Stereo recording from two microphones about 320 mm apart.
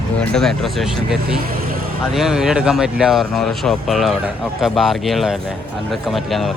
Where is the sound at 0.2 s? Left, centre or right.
Centre.